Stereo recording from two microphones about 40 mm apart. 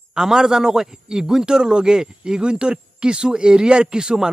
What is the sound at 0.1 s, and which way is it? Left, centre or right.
A man's voice, centre.